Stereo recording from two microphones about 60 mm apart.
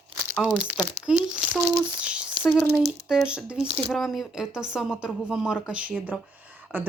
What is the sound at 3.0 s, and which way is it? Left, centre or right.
Speech, centre.